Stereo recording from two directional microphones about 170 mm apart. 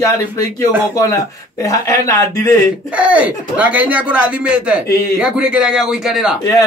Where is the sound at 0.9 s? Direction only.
20° left (ahead or behind).